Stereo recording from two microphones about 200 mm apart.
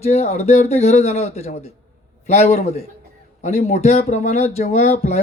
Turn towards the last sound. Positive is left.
turn(degrees=35)  # may be behind; listen again after turning